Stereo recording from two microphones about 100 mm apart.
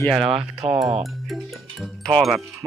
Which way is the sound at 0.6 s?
90° right.